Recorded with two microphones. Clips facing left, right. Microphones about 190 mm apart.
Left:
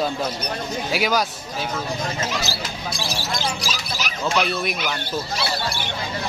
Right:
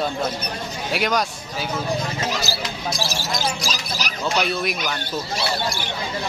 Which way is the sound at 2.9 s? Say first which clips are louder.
Even; 45° right (ahead or behind).